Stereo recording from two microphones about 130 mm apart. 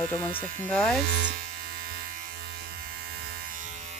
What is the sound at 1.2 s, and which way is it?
Speech, 90° right.